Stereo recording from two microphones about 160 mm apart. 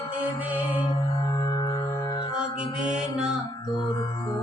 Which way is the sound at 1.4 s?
25° left (ahead or behind).